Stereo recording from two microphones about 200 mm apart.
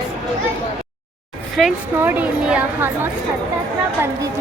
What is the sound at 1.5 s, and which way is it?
A woman's voice, 5° right (ahead or behind).